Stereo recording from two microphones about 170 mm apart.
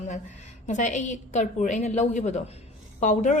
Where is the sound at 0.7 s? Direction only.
45° left (ahead or behind).